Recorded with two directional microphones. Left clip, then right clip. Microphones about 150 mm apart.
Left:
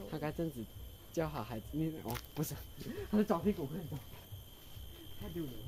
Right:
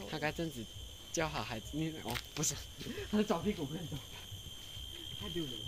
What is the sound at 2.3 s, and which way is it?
Speech, 85° left.